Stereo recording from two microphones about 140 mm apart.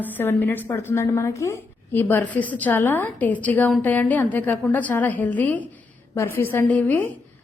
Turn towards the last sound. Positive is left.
turn(degrees=10)  # may be behind; listen again after turning